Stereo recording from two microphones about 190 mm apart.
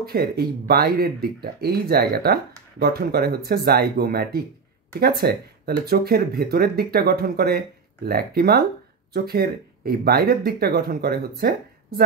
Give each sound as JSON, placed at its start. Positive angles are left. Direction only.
{"t": 0.0, "sound": "speech", "side_deg": -55}